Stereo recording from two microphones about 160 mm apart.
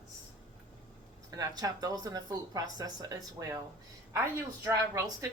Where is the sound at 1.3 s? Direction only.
25° right (ahead or behind).